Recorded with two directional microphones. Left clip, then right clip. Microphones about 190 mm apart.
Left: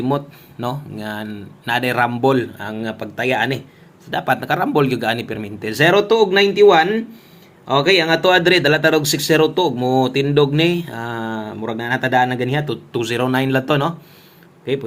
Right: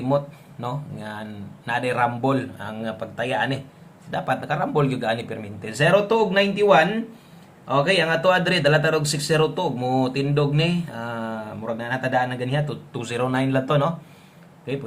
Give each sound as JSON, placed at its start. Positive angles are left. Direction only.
{"t": 0.6, "sound": "speech", "side_deg": 35}